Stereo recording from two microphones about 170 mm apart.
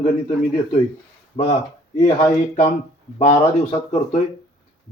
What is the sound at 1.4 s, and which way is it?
Speech, 40° left (ahead or behind).